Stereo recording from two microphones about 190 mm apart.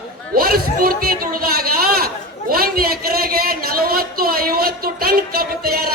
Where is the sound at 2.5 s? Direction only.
50° right (ahead or behind).